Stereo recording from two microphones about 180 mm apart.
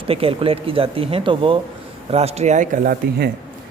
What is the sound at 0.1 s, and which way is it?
Speech, 30° right (ahead or behind).